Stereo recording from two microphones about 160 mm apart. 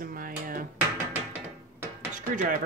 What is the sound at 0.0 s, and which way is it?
Music, 60° right (ahead or behind).